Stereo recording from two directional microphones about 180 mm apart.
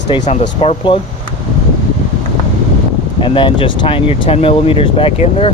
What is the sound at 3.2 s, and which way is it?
Speech, 30° left (ahead or behind).